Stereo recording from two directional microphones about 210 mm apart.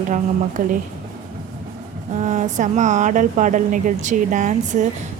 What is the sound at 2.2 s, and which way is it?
Speech, 35° right (ahead or behind).